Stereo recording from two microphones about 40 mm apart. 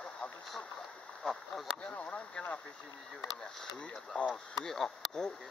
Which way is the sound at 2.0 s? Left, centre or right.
Left.